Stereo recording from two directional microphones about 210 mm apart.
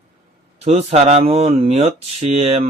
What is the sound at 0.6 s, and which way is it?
Speech, 30° right (ahead or behind).